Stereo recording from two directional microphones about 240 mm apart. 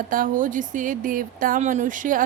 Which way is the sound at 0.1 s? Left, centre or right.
Right.